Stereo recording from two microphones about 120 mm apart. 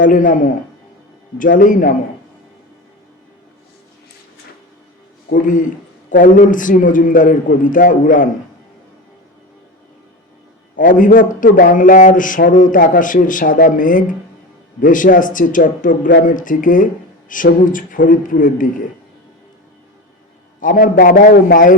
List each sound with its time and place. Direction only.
0.0 s speech: 90° left
6.1 s speech: 90° left
10.8 s speech: 90° left
20.6 s speech: 90° left